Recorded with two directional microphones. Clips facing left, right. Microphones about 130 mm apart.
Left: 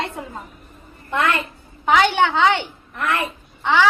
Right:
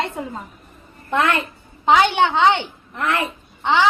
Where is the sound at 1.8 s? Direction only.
20° right (ahead or behind).